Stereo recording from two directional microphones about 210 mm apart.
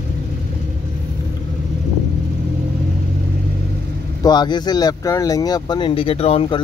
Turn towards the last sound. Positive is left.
turn(degrees=25)  # may be behind; listen again after turning